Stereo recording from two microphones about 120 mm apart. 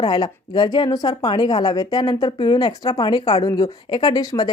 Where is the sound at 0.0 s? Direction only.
35° left (ahead or behind).